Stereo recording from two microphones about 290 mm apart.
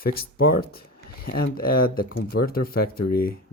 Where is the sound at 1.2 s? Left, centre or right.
Left.